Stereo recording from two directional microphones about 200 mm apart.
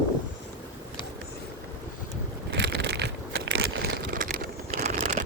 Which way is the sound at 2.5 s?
60° right (ahead or behind).